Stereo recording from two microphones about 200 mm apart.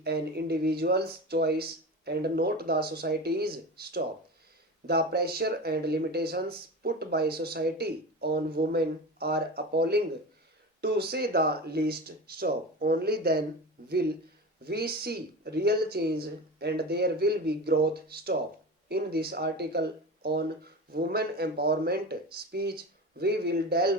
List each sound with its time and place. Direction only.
0.0 s speech: 55° right (ahead or behind)